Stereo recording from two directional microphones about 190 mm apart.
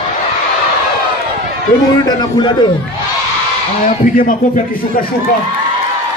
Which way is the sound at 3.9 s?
45° left (ahead or behind).